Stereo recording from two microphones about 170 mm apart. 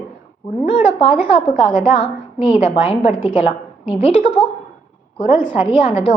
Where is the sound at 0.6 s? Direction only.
35° left (ahead or behind).